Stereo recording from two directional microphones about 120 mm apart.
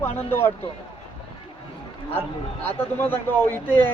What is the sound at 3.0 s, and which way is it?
Speech, 15° left (ahead or behind).